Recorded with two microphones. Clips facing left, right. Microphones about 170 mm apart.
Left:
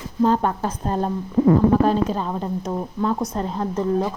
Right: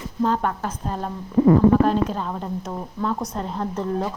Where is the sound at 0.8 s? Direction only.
35° left (ahead or behind).